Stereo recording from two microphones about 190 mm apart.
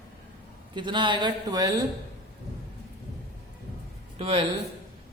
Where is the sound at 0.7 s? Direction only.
25° right (ahead or behind).